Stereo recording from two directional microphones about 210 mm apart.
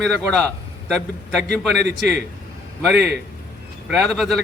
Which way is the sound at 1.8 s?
55° right (ahead or behind).